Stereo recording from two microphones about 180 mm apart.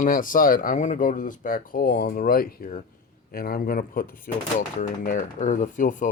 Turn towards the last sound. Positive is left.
turn(degrees=45)  # may be behind; listen again after turning